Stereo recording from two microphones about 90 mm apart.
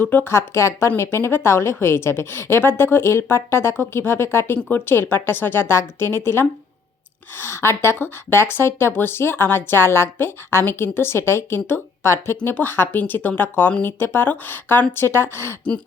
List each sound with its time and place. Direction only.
0.0 s speech: 20° left (ahead or behind)